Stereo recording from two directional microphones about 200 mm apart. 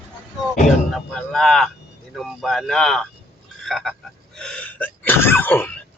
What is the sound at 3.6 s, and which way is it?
Sneeze, centre (ahead or behind).